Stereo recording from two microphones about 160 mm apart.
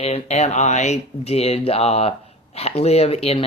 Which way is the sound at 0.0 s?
40° left (ahead or behind).